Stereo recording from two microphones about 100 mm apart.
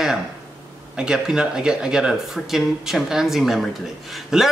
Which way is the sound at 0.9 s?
5° right (ahead or behind).